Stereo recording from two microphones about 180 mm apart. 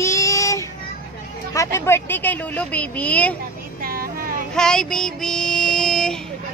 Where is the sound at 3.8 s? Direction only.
55° right (ahead or behind).